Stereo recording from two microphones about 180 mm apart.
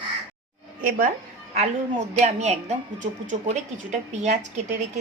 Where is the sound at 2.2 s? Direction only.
40° right (ahead or behind).